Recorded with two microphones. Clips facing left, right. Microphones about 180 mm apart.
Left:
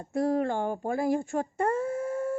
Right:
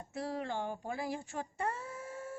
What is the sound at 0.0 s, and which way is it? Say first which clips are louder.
Speech: left 12 dB; 50° left (ahead or behind).